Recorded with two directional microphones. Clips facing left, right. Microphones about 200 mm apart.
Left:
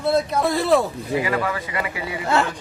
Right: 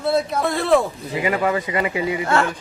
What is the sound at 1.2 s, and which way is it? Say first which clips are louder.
Speech: right 4 dB; 25° right (ahead or behind).